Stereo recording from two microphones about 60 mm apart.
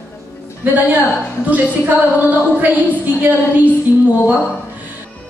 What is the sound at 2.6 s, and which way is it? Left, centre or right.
A woman's voice, right.